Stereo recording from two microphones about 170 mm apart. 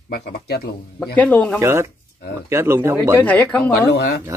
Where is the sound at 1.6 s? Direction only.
15° right (ahead or behind).